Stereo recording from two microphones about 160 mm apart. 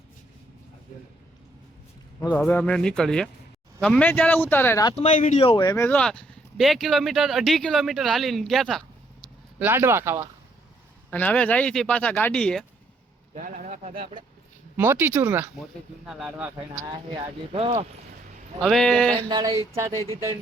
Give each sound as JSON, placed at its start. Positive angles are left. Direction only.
{"t": 2.3, "sound": "speech", "side_deg": 10}
{"t": 4.9, "sound": "speech", "side_deg": 50}
{"t": 5.4, "sound": "speech", "side_deg": 35}
{"t": 5.6, "sound": "speech", "side_deg": 15}
{"t": 6.0, "sound": "speech", "side_deg": 5}
{"t": 9.6, "sound": "speech", "side_deg": -15}
{"t": 11.1, "sound": "speech", "side_deg": 10}
{"t": 13.3, "sound": "speech", "side_deg": -55}
{"t": 14.8, "sound": "speech", "side_deg": -10}
{"t": 17.5, "sound": "speech", "side_deg": -40}
{"t": 18.6, "sound": "speech", "side_deg": 5}
{"t": 19.1, "sound": "speech", "side_deg": -25}
{"t": 19.9, "sound": "speech", "side_deg": 20}